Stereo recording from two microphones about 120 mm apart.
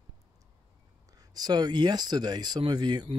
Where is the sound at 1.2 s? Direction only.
35° right (ahead or behind).